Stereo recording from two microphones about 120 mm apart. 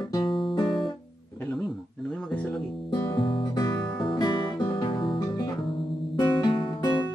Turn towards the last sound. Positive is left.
turn(degrees=40)  # may be behind; listen again after turning